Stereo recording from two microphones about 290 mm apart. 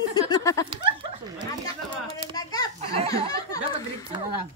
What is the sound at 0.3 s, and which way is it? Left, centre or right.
Speech, centre.